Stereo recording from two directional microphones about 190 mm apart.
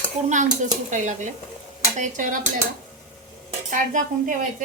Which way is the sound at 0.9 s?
40° right (ahead or behind).